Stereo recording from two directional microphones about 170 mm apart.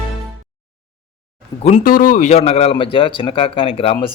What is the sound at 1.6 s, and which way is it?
A man's voice, 50° left (ahead or behind).